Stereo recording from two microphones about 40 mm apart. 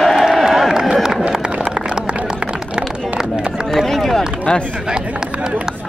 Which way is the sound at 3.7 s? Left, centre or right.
Centre.